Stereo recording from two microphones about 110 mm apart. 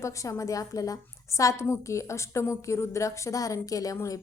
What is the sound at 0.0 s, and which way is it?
A woman's voice, 30° left (ahead or behind).